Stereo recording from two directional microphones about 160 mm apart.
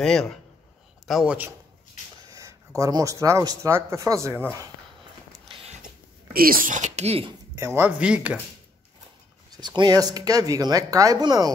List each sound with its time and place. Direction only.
0.0 s a man's voice: 5° left (ahead or behind)
2.3 s speech: 20° right (ahead or behind)
6.3 s speech: 65° right (ahead or behind); by 7.3 s 40° right (ahead or behind)
7.5 s speech: 15° right (ahead or behind)
9.6 s speech: 25° right (ahead or behind)